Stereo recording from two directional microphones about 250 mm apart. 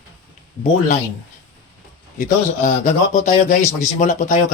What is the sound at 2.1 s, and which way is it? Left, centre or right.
A man's voice, left.